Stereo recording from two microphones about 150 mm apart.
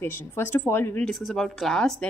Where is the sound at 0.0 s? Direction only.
15° left (ahead or behind).